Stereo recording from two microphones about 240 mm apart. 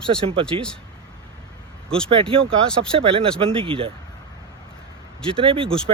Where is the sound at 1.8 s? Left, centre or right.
Centre.